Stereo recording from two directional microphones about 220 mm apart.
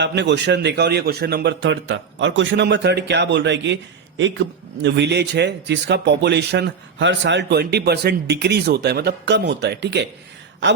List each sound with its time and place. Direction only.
0.0 s a man's voice: 50° right (ahead or behind)